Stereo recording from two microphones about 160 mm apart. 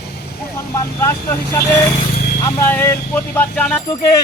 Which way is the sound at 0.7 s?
15° left (ahead or behind).